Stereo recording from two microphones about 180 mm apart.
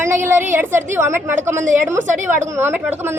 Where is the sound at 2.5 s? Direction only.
15° right (ahead or behind).